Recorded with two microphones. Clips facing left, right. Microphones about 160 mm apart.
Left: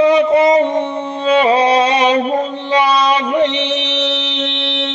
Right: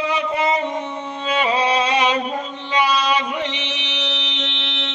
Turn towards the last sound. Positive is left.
turn(degrees=60)  # may be behind; listen again after turning